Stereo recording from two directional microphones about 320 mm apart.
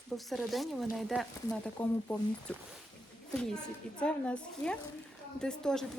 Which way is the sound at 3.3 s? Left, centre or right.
Centre.